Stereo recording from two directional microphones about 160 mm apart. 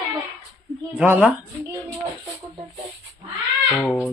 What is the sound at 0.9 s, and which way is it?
Speech, 10° right (ahead or behind).